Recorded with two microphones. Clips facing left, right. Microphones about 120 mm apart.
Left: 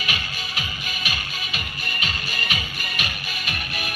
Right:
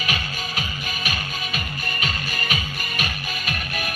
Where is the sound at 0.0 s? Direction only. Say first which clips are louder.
Right 3 dB; 40° right (ahead or behind).